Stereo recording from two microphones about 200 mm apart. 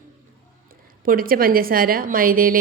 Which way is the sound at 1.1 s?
45° right (ahead or behind).